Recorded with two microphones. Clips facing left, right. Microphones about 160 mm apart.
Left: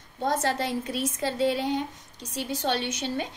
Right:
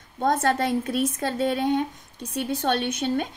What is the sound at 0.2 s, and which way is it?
A woman's voice, 55° right (ahead or behind).